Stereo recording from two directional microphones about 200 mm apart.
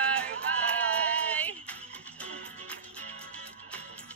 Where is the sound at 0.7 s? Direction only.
5° left (ahead or behind).